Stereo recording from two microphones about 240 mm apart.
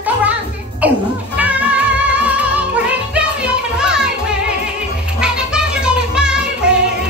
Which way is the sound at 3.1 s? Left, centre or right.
Centre.